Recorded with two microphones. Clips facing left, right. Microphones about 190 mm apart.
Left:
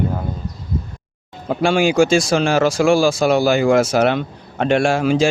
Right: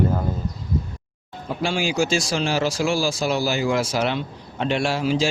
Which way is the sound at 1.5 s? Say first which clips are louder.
Left 8 dB; 55° left (ahead or behind).